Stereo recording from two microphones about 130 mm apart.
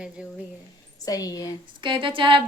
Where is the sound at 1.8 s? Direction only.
40° right (ahead or behind).